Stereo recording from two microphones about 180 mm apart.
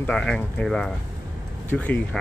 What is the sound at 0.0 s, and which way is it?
Speech, 5° left (ahead or behind).